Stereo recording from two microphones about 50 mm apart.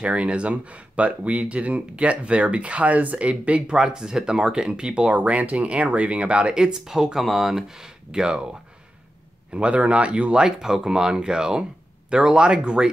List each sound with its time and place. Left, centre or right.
0.0 s speech: right
9.5 s speech: right